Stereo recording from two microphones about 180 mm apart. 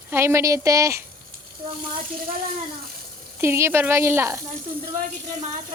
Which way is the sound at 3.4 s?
15° right (ahead or behind).